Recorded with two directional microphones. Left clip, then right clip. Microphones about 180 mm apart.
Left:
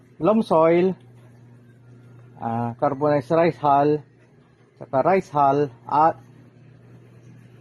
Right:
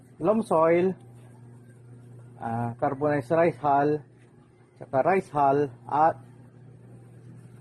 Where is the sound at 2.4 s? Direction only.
50° left (ahead or behind).